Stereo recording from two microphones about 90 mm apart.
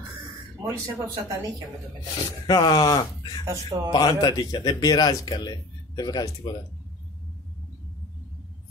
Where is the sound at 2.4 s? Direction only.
50° left (ahead or behind).